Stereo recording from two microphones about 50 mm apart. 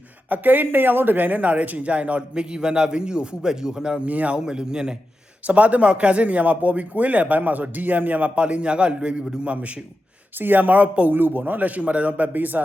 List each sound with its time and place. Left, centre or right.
0.3 s speech: right; by 4.1 s centre
4.1 s speech: right
4.4 s a man's voice: centre
5.5 s speech: right
10.3 s speech: right